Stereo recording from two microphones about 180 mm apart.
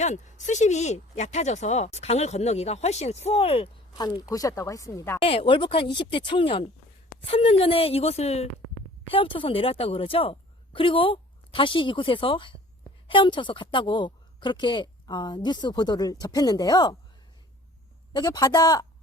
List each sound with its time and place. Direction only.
0.0 s speech: 40° left (ahead or behind); by 5.2 s 15° left (ahead or behind)
5.2 s a woman's voice: 30° left (ahead or behind)
18.1 s a woman's voice: 20° left (ahead or behind)